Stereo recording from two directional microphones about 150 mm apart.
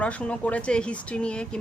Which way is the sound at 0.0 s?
10° left (ahead or behind).